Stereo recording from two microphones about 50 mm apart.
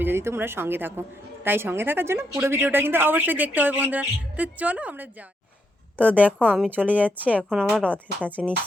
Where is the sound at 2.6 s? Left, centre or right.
Right.